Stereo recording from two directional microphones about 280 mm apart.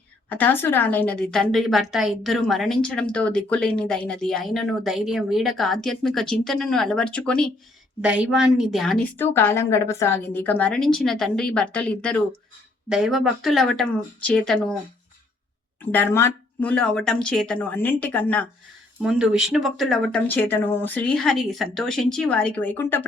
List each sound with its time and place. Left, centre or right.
0.3 s a woman's voice: centre
15.8 s a woman's voice: centre